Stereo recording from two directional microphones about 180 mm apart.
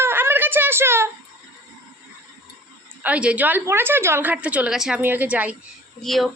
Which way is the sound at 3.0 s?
5° right (ahead or behind).